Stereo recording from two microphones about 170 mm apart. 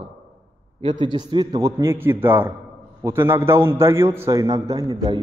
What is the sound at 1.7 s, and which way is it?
A man's voice, 15° right (ahead or behind).